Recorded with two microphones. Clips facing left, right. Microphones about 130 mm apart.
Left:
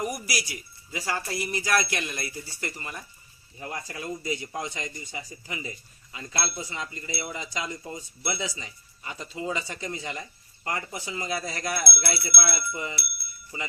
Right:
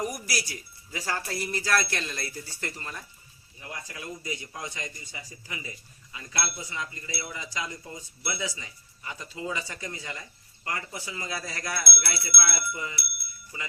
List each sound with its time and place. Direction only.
0.0 s speech: 10° left (ahead or behind)
3.6 s speech: 40° left (ahead or behind)